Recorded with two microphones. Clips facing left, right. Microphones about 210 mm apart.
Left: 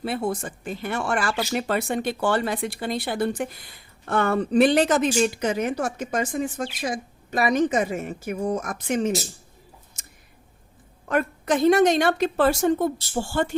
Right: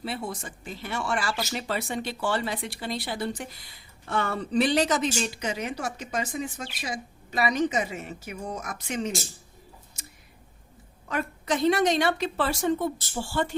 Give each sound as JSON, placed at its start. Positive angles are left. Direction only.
{"t": 0.0, "sound": "a woman's voice", "side_deg": 55}
{"t": 11.1, "sound": "a woman's voice", "side_deg": 55}